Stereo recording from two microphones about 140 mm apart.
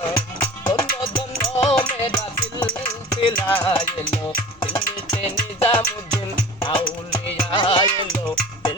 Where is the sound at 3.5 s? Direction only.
40° left (ahead or behind).